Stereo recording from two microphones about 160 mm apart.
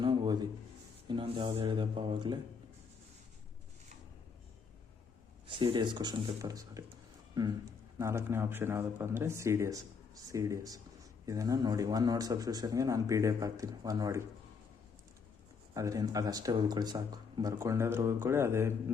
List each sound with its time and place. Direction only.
0.0 s a sound: 30° right (ahead or behind)
1.0 s speech: 30° right (ahead or behind)
5.5 s speech: 30° right (ahead or behind)
15.7 s speech: 20° right (ahead or behind)